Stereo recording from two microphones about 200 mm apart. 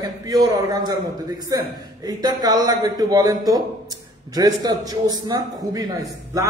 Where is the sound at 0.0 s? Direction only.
20° right (ahead or behind).